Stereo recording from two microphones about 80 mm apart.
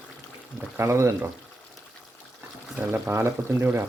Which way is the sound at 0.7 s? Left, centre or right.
Right.